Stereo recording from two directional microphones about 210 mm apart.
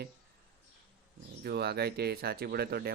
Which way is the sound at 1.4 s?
50° right (ahead or behind).